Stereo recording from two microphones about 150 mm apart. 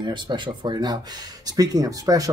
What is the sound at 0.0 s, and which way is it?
Speech, 30° right (ahead or behind).